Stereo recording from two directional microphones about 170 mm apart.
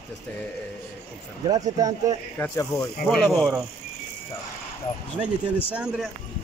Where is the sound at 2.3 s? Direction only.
15° left (ahead or behind).